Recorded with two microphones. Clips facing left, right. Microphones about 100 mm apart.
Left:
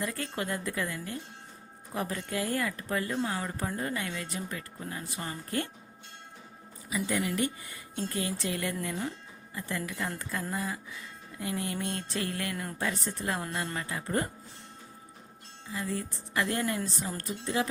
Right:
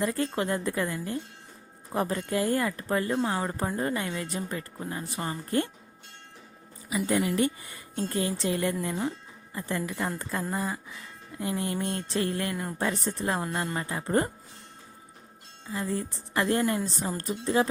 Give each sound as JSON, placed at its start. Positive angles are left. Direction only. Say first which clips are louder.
{"t": 0.0, "sound": "speech", "louder": "right 6 dB", "side_deg": -30}
{"t": 6.9, "sound": "speech", "louder": "right 4 dB", "side_deg": -30}
{"t": 15.7, "sound": "speech", "louder": "right 3 dB", "side_deg": -30}